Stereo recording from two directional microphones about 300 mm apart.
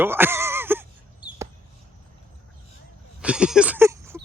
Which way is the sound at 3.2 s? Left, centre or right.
Centre.